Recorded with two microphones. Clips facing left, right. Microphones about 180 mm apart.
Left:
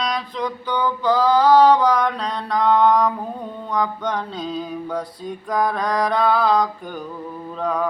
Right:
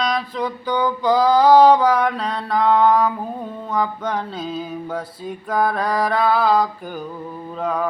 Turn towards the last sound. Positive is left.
turn(degrees=-5)  # may be behind; listen again after turning